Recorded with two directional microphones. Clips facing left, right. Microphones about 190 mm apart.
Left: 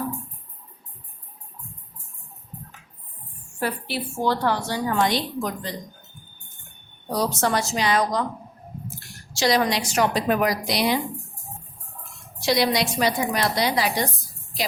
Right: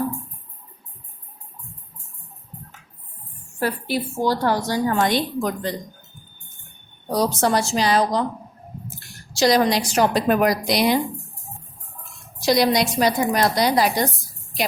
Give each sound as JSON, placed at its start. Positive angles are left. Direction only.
{"t": 3.6, "sound": "a woman's voice", "side_deg": -40}
{"t": 7.2, "sound": "a woman's voice", "side_deg": -35}
{"t": 9.3, "sound": "a woman's voice", "side_deg": -35}
{"t": 12.4, "sound": "a woman's voice", "side_deg": -40}